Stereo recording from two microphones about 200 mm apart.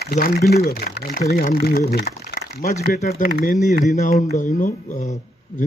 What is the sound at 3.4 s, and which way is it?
Speech, 40° left (ahead or behind).